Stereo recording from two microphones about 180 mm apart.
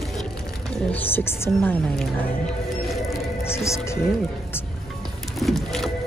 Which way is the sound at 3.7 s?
15° left (ahead or behind).